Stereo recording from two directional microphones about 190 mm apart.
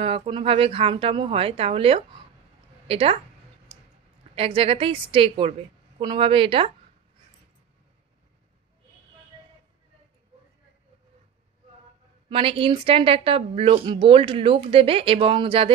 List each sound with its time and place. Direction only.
0.0 s a woman's voice: 30° right (ahead or behind)
4.4 s a woman's voice: 30° right (ahead or behind)
12.3 s a woman's voice: 30° right (ahead or behind)